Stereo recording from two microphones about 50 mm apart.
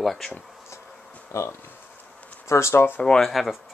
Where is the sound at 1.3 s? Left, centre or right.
Left.